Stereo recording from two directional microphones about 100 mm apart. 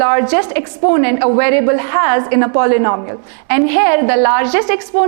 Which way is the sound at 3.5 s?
20° right (ahead or behind).